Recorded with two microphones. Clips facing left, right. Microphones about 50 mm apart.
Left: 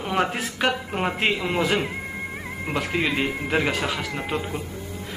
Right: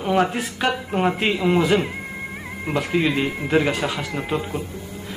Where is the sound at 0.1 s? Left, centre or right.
Left.